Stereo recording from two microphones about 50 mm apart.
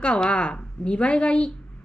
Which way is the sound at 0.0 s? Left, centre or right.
Centre.